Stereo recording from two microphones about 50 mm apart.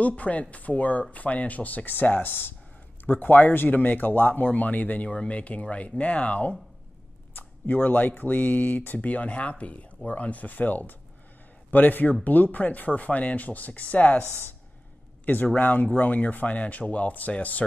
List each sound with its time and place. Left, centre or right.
0.0 s speech: left
14.2 s speech: right
15.2 s speech: left